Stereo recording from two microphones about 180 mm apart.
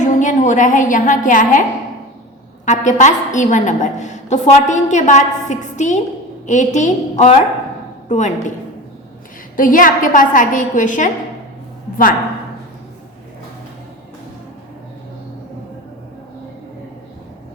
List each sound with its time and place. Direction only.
0.0 s a woman's voice: 45° left (ahead or behind)
2.6 s a woman's voice: 40° left (ahead or behind)
9.6 s a woman's voice: 50° left (ahead or behind)